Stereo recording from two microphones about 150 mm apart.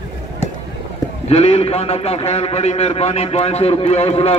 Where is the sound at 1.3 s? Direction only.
45° left (ahead or behind).